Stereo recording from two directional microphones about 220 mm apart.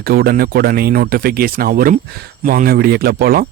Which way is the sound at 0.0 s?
45° right (ahead or behind).